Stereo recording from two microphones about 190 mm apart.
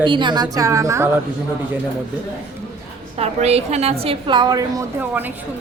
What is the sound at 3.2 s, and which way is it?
A woman's voice, 35° right (ahead or behind).